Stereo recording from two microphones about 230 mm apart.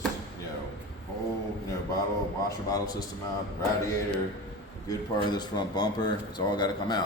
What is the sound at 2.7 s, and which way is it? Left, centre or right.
Speech, centre.